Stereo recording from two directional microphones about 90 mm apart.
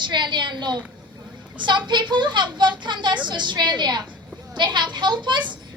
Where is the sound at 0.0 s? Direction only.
55° right (ahead or behind).